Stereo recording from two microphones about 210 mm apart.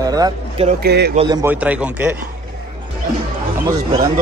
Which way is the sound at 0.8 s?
50° right (ahead or behind).